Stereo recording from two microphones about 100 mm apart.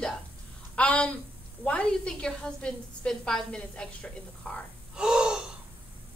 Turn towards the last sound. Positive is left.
turn(degrees=-5)  # may be behind; listen again after turning